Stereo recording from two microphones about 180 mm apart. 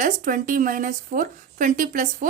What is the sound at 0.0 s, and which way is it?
A woman's voice, 45° right (ahead or behind).